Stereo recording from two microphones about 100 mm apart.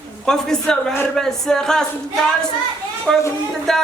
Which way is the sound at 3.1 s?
5° left (ahead or behind).